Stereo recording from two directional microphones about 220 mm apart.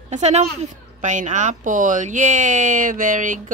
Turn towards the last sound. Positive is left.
turn(degrees=-35)  # may be behind; listen again after turning